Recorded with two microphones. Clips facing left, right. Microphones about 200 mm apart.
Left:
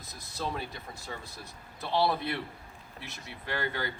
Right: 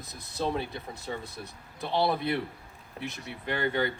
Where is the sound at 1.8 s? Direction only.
20° right (ahead or behind).